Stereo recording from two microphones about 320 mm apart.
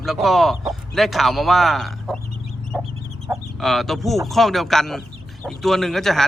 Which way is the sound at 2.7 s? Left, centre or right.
Centre.